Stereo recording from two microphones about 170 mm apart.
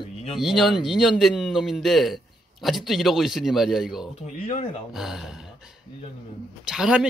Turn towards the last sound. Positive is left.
turn(degrees=-5)  # may be behind; listen again after turning